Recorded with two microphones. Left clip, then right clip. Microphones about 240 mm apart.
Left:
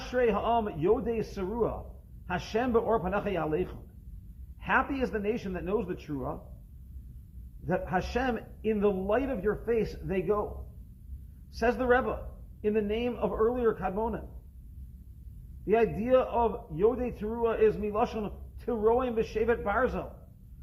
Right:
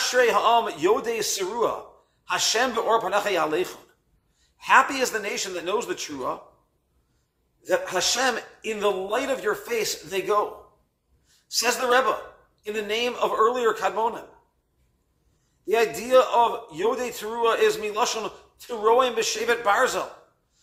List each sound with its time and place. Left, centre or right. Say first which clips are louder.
0.1 s a man's voice: right 7 dB; centre
7.7 s a man's voice: right 7 dB; centre
11.5 s a woman's voice: right 5 dB; centre
15.6 s a man's voice: right 3 dB; centre